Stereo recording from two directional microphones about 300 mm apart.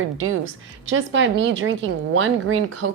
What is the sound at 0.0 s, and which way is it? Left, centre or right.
A woman's voice, right.